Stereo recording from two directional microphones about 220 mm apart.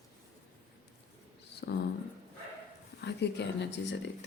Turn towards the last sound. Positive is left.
turn(degrees=50)  # may be behind; listen again after turning